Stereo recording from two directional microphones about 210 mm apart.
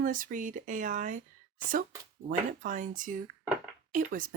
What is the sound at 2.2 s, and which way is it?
Speech, 40° right (ahead or behind).